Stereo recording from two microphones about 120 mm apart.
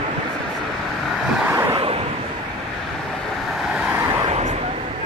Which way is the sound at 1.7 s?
50° right (ahead or behind).